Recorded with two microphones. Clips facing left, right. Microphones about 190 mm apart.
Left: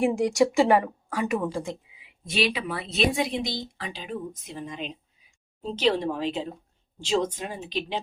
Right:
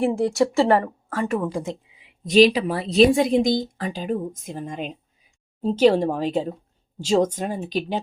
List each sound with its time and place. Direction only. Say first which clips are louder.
0.0 s speech: right 2 dB; 15° left (ahead or behind)
2.2 s speech: right 11 dB; 40° right (ahead or behind)